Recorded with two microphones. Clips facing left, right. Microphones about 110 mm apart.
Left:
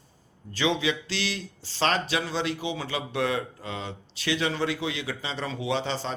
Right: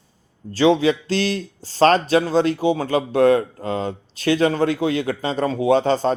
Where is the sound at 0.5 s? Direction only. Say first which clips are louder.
Right 10 dB; 40° right (ahead or behind).